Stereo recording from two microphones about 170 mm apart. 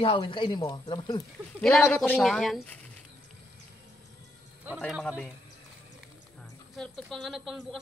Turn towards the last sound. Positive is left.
turn(degrees=0)  # may be behind; listen again after turning